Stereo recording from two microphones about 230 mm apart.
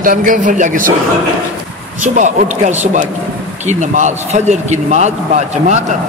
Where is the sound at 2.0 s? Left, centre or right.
Right.